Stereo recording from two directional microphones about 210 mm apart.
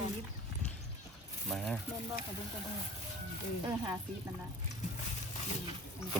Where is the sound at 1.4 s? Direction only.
Centre (ahead or behind).